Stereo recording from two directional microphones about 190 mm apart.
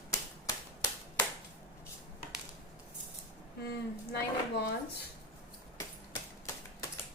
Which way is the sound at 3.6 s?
60° left (ahead or behind).